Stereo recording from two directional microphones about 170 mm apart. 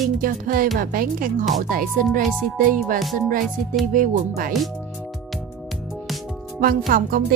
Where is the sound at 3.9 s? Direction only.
55° right (ahead or behind).